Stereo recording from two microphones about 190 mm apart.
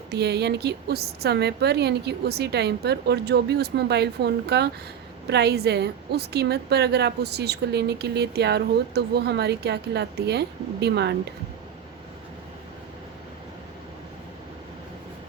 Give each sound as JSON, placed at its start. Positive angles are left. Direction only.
{"t": 0.1, "sound": "a woman's voice", "side_deg": -60}